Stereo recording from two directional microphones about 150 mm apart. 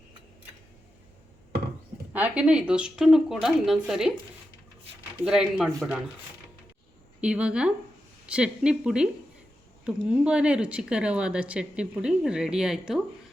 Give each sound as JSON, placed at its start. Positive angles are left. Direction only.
{"t": 2.1, "sound": "speech", "side_deg": -10}
{"t": 5.2, "sound": "speech", "side_deg": -5}
{"t": 7.2, "sound": "speech", "side_deg": -5}